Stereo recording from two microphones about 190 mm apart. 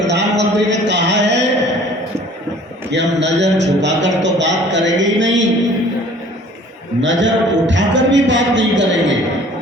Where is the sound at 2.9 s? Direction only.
65° right (ahead or behind).